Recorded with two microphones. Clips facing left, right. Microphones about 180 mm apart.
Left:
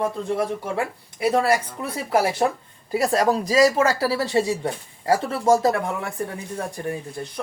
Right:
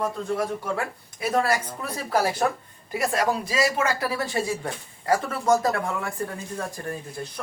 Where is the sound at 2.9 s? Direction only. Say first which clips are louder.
Left 4 dB; 35° left (ahead or behind); by 6.1 s 20° left (ahead or behind).